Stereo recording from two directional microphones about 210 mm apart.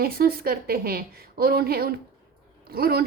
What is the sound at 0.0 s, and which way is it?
Speech, 45° right (ahead or behind).